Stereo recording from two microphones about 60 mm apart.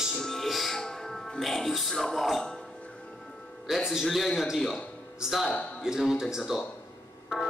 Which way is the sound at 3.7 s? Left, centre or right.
Centre.